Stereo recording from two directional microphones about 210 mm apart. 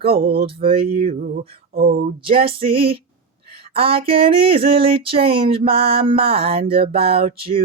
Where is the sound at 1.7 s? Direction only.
45° right (ahead or behind).